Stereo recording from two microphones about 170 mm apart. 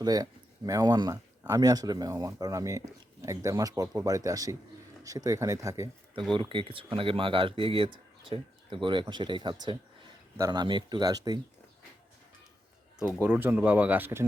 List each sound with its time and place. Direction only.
0.0 s speech: 20° right (ahead or behind)
6.3 s speech: 30° right (ahead or behind)
13.1 s speech: 10° right (ahead or behind)